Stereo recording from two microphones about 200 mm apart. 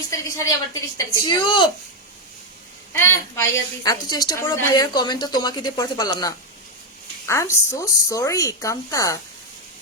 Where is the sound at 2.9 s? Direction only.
15° left (ahead or behind).